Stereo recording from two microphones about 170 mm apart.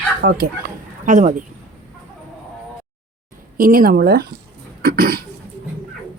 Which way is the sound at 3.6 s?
60° right (ahead or behind).